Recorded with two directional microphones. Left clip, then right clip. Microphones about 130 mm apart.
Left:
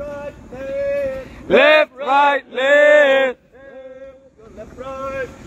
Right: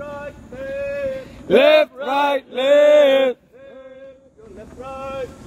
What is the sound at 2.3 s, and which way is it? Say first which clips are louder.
Male singing: left 1 dB; 90° right.